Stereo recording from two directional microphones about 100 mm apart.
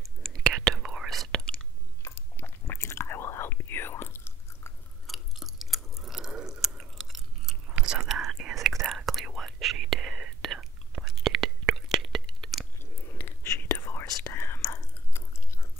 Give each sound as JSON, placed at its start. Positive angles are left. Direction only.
{"t": 0.0, "sound": "whispering", "side_deg": 5}
{"t": 2.0, "sound": "chewing", "side_deg": 25}
{"t": 5.0, "sound": "chewing", "side_deg": 0}
{"t": 8.8, "sound": "whispering", "side_deg": 0}
{"t": 13.2, "sound": "whispering", "side_deg": 25}